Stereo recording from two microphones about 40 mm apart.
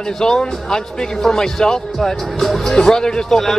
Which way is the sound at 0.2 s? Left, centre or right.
Centre.